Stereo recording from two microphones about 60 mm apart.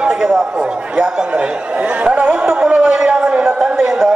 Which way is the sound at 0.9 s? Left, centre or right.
Centre.